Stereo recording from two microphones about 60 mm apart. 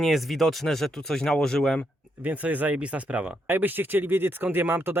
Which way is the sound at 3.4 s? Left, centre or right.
Right.